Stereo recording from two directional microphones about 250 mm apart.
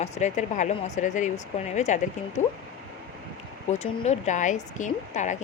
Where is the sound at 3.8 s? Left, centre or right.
Left.